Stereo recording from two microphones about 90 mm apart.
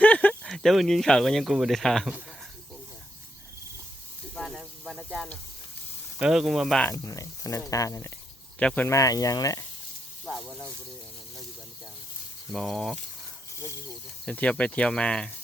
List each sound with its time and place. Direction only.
0.0 s a sound: 15° left (ahead or behind)
0.4 s speech: 5° left (ahead or behind)
4.4 s snake: centre (ahead or behind)
6.1 s speech: 5° right (ahead or behind)
6.9 s speech: 35° left (ahead or behind)
8.5 s speech: 15° left (ahead or behind)
8.9 s speech: 40° left (ahead or behind)
10.2 s speech: centre (ahead or behind)
12.5 s speech: 5° left (ahead or behind)
14.3 s speech: 15° left (ahead or behind)